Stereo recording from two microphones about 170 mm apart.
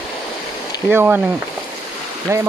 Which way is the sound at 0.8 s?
10° right (ahead or behind).